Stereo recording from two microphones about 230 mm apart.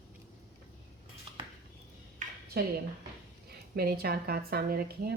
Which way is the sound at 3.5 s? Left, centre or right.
Right.